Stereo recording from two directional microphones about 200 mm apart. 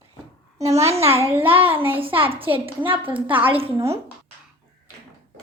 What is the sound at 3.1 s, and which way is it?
Speech, 10° right (ahead or behind).